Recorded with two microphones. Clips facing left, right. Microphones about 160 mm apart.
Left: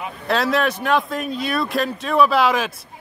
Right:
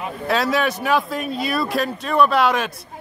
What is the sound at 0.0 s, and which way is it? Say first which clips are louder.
Speech: even; centre (ahead or behind).